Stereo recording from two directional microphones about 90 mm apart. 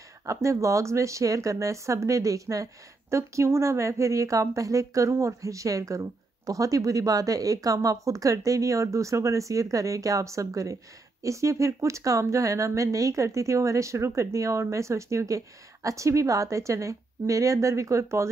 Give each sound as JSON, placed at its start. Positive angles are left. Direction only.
{"t": 0.3, "sound": "speech", "side_deg": -35}